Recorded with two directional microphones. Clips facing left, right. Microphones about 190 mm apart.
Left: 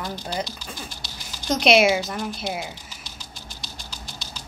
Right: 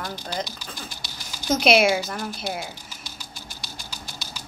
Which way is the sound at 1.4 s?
Centre (ahead or behind).